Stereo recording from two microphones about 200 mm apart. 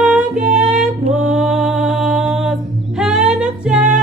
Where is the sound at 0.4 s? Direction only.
35° right (ahead or behind).